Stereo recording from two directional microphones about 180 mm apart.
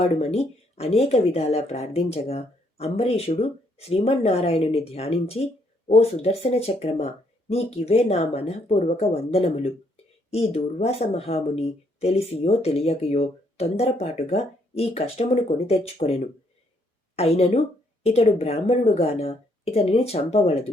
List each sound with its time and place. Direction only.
0.2 s speech: 35° left (ahead or behind)